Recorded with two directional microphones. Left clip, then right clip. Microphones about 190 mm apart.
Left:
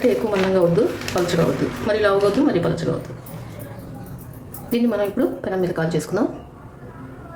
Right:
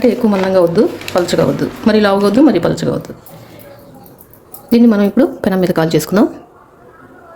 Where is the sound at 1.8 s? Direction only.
55° right (ahead or behind).